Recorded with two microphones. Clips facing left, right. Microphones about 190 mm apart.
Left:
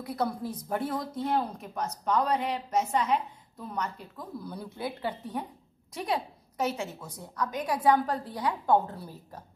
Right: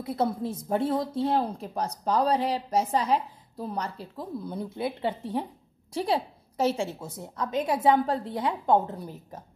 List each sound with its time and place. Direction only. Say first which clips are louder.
0.0 s a woman's voice: right 3 dB; 25° right (ahead or behind)